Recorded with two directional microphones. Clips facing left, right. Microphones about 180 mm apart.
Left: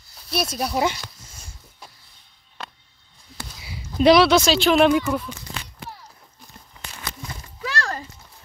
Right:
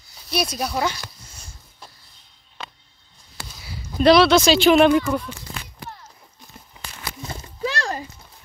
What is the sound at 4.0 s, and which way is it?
Speech, 10° left (ahead or behind).